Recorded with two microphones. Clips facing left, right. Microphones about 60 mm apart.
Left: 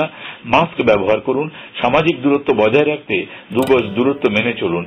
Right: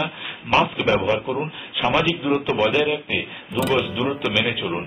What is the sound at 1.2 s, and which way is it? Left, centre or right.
Speech, centre.